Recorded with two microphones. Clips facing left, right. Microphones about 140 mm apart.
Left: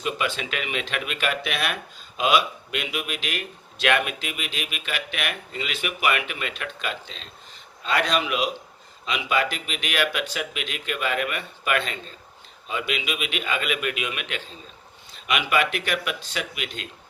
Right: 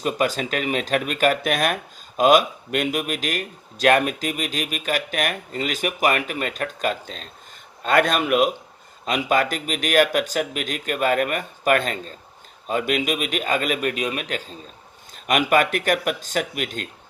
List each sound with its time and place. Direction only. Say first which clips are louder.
0.0 s speech: right 5 dB; 40° right (ahead or behind)